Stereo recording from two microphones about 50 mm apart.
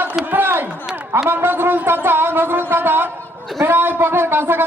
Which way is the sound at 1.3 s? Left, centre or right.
Right.